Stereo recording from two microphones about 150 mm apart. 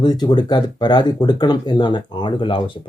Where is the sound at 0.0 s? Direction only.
30° left (ahead or behind).